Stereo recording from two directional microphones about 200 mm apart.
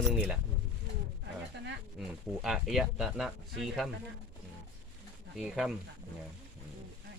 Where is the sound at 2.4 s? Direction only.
Centre (ahead or behind).